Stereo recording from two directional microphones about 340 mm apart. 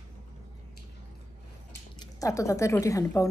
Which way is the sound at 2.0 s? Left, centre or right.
Centre.